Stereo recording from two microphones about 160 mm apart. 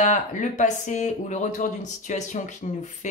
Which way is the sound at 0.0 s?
50° left (ahead or behind).